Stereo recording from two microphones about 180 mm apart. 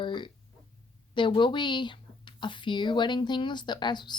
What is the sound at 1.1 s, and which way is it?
Speech, 25° left (ahead or behind).